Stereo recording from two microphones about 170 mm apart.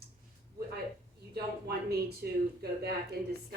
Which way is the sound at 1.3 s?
70° right (ahead or behind).